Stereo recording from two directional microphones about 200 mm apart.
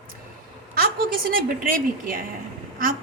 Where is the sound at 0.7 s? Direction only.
45° right (ahead or behind).